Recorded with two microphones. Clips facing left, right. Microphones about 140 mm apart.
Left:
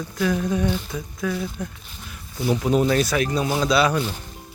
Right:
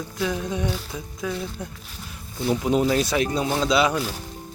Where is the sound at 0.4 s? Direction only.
20° right (ahead or behind).